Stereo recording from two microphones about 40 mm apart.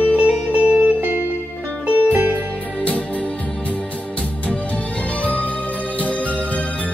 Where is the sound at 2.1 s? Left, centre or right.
Right.